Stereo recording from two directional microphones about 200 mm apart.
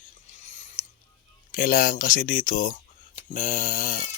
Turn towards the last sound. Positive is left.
turn(degrees=40)  # may be behind; listen again after turning